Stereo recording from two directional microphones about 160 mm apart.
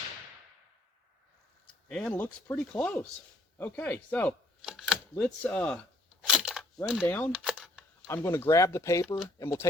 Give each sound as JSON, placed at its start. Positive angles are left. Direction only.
{"t": 1.9, "sound": "speech", "side_deg": 5}
{"t": 4.6, "sound": "a sound", "side_deg": -5}
{"t": 5.2, "sound": "speech", "side_deg": 10}
{"t": 6.2, "sound": "a sound", "side_deg": 0}
{"t": 7.0, "sound": "speech", "side_deg": 10}
{"t": 7.3, "sound": "camera", "side_deg": -5}
{"t": 8.0, "sound": "speech", "side_deg": 15}